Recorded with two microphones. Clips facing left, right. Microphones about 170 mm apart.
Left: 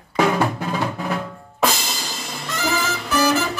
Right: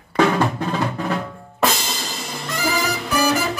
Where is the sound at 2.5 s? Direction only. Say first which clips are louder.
Right 1 dB; 10° right (ahead or behind).